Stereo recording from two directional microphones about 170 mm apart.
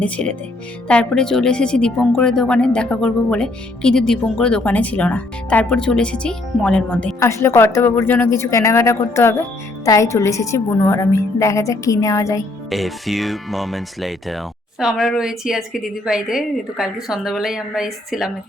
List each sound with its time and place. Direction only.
0.0 s a woman's voice: 5° left (ahead or behind)
12.7 s speech: centre (ahead or behind)